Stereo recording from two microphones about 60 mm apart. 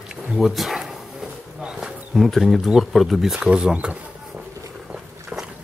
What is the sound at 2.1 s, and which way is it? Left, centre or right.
Speech, centre.